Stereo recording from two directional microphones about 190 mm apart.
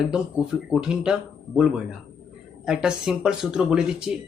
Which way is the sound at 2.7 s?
5° right (ahead or behind).